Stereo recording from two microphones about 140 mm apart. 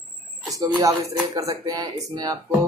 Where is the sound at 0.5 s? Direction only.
25° right (ahead or behind).